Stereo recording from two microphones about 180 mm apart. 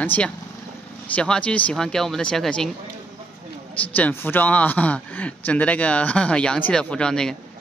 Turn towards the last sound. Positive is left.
turn(degrees=5)  # may be behind; listen again after turning